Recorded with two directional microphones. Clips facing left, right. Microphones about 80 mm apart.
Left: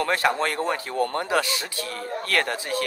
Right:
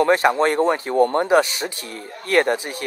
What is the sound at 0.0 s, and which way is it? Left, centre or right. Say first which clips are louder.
Speech: right 7 dB; right.